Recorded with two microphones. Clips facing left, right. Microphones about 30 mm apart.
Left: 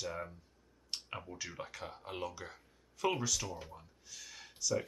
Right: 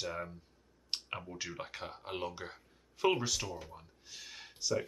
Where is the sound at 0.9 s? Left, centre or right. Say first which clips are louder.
Right 4 dB; right.